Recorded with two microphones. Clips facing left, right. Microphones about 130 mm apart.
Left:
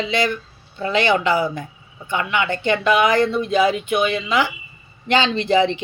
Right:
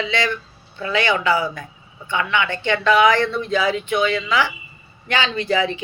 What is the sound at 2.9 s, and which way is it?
Speech, 15° left (ahead or behind).